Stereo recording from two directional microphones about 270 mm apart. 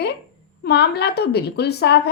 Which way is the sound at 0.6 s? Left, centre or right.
Left.